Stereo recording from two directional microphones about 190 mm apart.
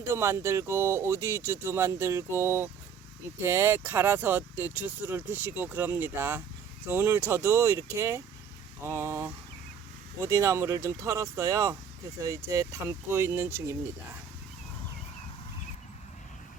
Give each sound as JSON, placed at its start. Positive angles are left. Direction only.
{"t": 0.1, "sound": "speech", "side_deg": -15}